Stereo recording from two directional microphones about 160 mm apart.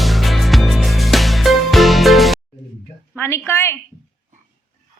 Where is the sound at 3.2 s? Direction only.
15° left (ahead or behind).